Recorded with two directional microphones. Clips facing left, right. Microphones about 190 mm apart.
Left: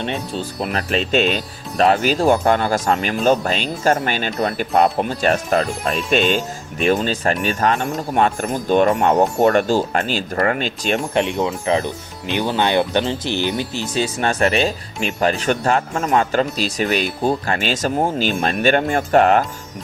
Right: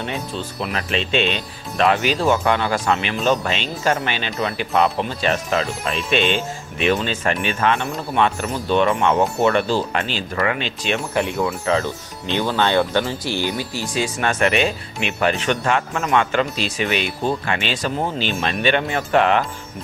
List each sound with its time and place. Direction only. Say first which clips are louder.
0.3 s speech: left 3 dB; 40° left (ahead or behind)
11.1 s speech: left 2 dB; 20° left (ahead or behind); by 19.5 s 45° left (ahead or behind)